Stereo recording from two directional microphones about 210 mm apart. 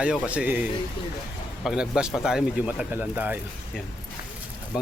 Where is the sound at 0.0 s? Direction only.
5° right (ahead or behind).